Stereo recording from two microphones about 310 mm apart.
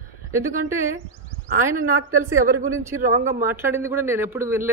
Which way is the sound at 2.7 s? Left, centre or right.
Centre.